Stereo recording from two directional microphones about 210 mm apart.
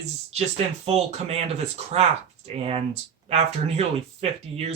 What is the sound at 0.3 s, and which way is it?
Speech, 30° right (ahead or behind).